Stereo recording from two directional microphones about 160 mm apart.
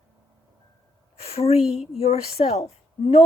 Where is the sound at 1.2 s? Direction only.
40° left (ahead or behind).